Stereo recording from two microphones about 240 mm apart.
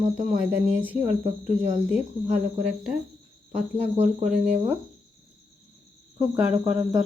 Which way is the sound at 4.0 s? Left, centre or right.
Right.